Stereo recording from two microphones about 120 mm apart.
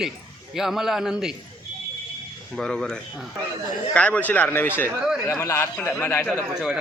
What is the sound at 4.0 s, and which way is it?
A man's voice, 10° left (ahead or behind).